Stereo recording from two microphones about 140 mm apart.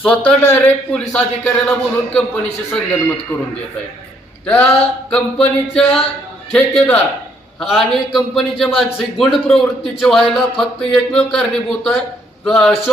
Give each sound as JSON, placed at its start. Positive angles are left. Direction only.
{"t": 0.0, "sound": "a man's voice", "side_deg": 10}
{"t": 4.4, "sound": "a man's voice", "side_deg": 10}